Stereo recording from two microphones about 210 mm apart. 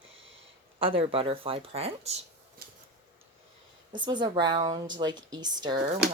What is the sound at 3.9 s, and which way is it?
Speech, 20° right (ahead or behind).